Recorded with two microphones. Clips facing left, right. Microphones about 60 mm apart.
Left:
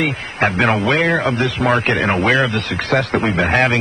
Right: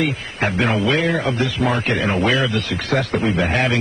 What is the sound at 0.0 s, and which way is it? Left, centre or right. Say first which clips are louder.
A man's voice: left 3 dB; left.